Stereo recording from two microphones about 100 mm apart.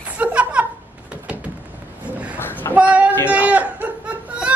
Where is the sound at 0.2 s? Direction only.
10° right (ahead or behind).